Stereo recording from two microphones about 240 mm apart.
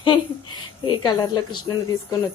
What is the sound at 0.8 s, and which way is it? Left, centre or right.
Speech, centre.